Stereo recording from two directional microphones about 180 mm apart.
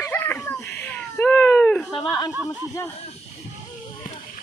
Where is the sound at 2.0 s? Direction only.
20° left (ahead or behind).